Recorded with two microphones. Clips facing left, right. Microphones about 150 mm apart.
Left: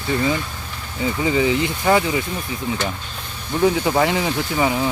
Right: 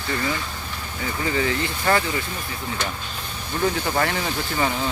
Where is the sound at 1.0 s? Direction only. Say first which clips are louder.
Left 6 dB; 15° left (ahead or behind).